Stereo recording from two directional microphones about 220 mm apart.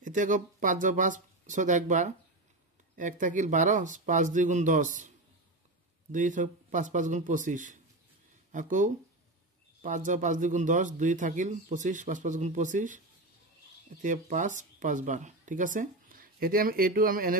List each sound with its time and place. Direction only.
0.0 s a man's voice: 35° right (ahead or behind)
6.1 s a man's voice: 35° right (ahead or behind)
14.0 s speech: 35° right (ahead or behind)